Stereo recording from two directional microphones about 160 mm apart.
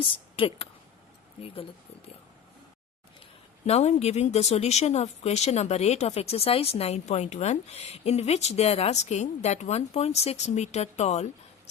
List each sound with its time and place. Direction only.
0.0 s speech: 35° left (ahead or behind)
3.7 s speech: 45° left (ahead or behind)